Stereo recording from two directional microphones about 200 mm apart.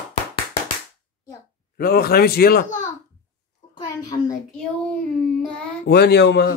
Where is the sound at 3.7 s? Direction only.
20° left (ahead or behind).